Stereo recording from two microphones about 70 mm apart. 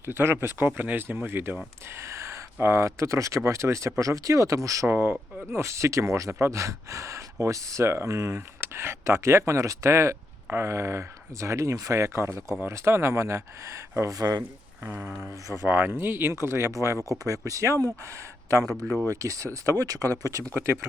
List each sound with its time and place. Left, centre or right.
0.0 s speech: right
1.9 s speech: right
4.9 s speech: right
5.5 s speech: right
14.2 s speech: right
14.8 s speech: right
15.2 s speech: right
20.5 s speech: right